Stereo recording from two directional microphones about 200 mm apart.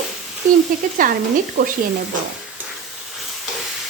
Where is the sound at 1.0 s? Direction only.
40° right (ahead or behind).